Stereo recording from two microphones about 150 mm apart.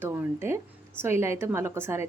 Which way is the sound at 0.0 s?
15° right (ahead or behind).